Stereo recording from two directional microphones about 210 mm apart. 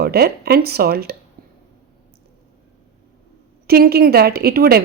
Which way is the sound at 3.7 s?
50° right (ahead or behind).